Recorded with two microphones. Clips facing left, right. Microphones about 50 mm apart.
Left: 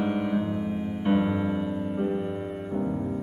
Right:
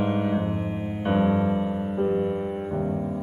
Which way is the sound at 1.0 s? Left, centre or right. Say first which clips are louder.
Right 3 dB; right.